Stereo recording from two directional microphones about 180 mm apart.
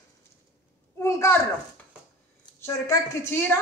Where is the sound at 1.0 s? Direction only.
15° left (ahead or behind).